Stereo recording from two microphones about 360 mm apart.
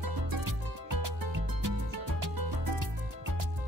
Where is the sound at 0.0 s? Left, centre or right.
Right.